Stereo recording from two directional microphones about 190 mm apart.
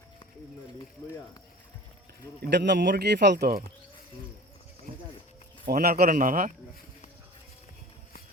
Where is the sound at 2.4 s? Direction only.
65° right (ahead or behind).